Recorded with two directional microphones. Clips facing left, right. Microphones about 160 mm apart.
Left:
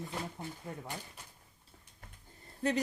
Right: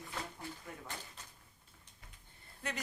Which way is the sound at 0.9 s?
10° left (ahead or behind).